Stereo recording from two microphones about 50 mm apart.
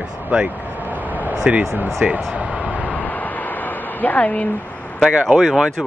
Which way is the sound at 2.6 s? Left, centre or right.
Left.